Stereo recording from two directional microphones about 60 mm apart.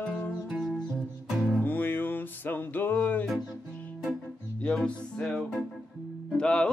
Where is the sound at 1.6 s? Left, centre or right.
Left.